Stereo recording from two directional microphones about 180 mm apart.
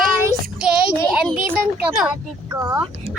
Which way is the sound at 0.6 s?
5° right (ahead or behind).